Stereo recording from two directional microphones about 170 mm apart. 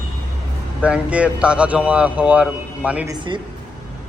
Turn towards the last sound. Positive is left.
turn(degrees=-30)  # may be behind; listen again after turning